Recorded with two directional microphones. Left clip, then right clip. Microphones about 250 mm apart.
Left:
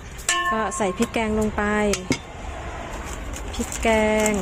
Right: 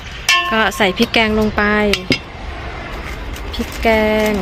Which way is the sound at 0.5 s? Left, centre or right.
Centre.